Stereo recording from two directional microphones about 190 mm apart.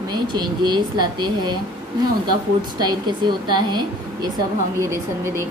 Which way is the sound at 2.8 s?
20° right (ahead or behind).